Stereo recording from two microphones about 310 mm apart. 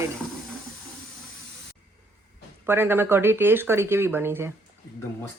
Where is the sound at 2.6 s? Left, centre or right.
Centre.